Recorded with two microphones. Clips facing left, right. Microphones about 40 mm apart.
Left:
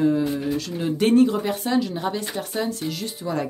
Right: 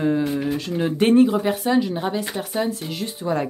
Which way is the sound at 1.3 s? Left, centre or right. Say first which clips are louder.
Right 3 dB; centre.